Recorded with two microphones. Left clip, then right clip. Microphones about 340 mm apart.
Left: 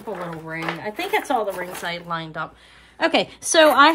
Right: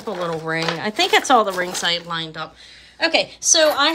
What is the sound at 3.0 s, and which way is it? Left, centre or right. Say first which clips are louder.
Speech: right 1 dB; centre.